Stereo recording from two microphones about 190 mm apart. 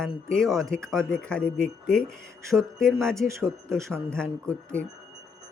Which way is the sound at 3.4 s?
15° right (ahead or behind).